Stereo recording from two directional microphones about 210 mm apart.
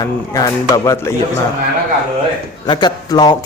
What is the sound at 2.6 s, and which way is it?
Speech, 20° left (ahead or behind).